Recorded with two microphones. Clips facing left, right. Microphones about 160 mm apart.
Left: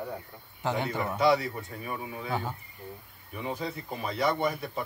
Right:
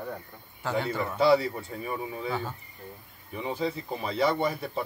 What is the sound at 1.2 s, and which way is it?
Speech, 30° right (ahead or behind).